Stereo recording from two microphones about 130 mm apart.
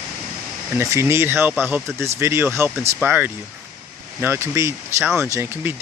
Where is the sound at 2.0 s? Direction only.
20° right (ahead or behind).